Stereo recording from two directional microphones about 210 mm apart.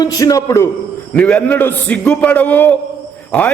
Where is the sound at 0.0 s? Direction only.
15° left (ahead or behind).